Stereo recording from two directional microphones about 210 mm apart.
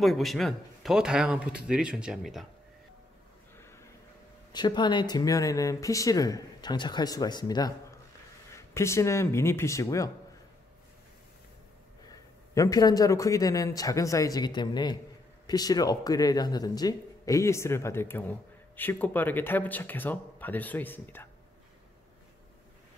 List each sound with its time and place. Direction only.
0.0 s speech: centre (ahead or behind)
3.5 s a sound: 10° left (ahead or behind)
4.5 s speech: 20° left (ahead or behind)
12.1 s speech: 15° left (ahead or behind)